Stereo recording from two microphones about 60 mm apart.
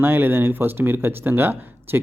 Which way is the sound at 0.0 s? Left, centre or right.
Right.